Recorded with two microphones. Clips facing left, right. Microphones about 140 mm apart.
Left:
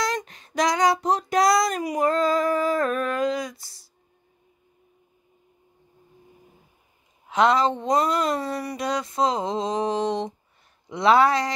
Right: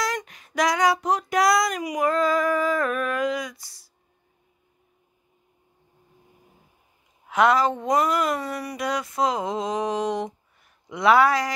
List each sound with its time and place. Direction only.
0.0 s female singing: 25° left (ahead or behind)
7.2 s female singing: 25° left (ahead or behind)